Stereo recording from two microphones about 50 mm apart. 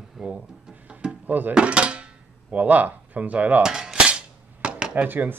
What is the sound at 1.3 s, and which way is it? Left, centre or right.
Speech, right.